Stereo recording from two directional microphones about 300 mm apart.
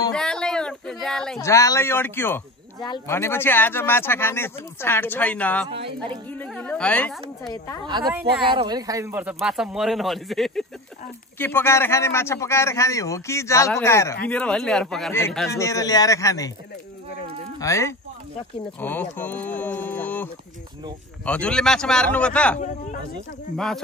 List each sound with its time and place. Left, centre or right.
0.1 s speech: centre
5.7 s a woman's voice: centre
6.4 s speech: centre
7.8 s a woman's voice: centre
17.6 s speech: centre
21.3 s speech: centre